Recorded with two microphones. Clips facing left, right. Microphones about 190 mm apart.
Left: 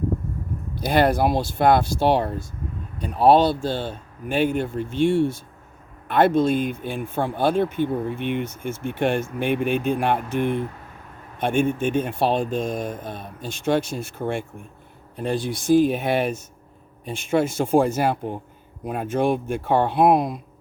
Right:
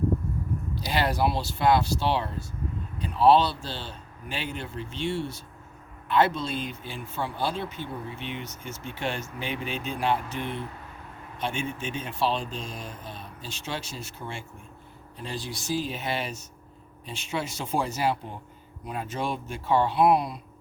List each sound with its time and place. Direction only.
0.8 s speech: 50° left (ahead or behind)